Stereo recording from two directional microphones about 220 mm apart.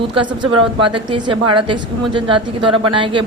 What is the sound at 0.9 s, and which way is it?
A woman's voice, 20° right (ahead or behind).